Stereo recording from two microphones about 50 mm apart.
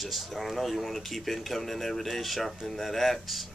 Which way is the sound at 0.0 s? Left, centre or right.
Centre.